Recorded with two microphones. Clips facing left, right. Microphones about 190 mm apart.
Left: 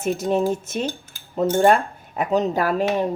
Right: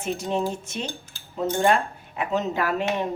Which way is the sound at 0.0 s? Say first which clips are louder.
Left 5 dB; 45° left (ahead or behind).